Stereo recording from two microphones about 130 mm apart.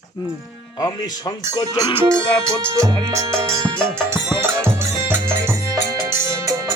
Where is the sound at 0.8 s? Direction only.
30° left (ahead or behind).